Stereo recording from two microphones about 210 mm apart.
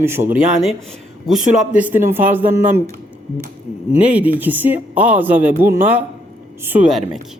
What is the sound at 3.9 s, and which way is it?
Speech, 5° right (ahead or behind).